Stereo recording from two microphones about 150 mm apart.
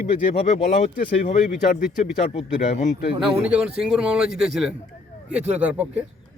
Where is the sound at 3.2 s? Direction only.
5° right (ahead or behind).